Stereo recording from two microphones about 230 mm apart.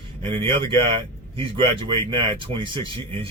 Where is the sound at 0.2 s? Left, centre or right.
Right.